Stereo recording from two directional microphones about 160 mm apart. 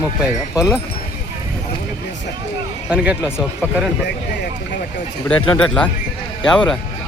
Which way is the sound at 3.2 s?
15° left (ahead or behind).